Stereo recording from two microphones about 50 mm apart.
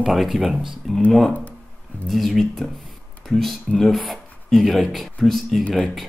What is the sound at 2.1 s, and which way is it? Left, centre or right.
Speech, centre.